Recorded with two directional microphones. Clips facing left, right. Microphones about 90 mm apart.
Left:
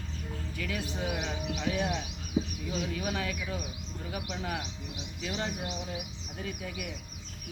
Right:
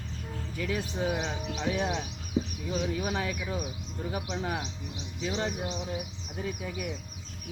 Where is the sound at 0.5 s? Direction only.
25° right (ahead or behind).